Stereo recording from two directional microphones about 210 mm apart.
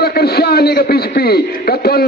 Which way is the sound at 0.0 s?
50° left (ahead or behind).